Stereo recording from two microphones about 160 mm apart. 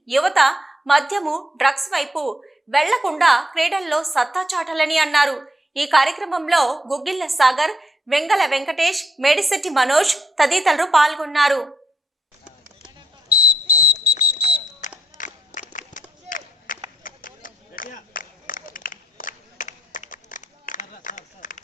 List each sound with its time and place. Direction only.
0.0 s a woman's voice: centre (ahead or behind)
13.9 s fire alarm: 75° left (ahead or behind)
14.8 s a sound: 50° left (ahead or behind)
15.7 s run: 55° left (ahead or behind)